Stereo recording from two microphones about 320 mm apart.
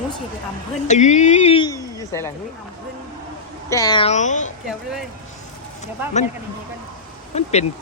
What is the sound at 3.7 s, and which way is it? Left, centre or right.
Speech, centre.